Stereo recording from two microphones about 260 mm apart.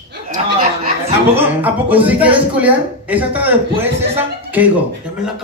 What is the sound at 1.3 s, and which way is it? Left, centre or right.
A man's voice, centre.